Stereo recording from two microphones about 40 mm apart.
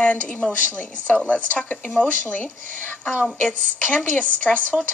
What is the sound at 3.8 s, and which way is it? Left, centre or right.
Speech, left.